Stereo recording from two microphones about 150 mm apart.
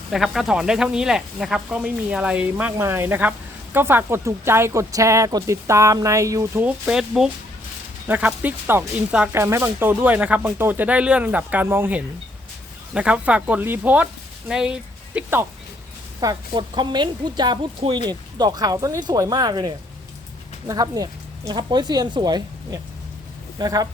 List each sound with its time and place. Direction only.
0.1 s speech: centre (ahead or behind)
16.2 s a woman's voice: 30° right (ahead or behind)